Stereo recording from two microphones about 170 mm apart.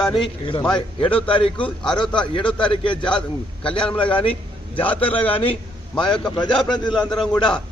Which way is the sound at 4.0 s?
30° left (ahead or behind).